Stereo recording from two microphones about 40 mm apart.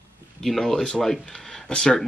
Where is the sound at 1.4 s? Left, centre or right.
Centre.